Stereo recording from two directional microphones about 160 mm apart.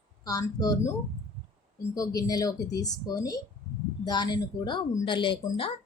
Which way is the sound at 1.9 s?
20° left (ahead or behind).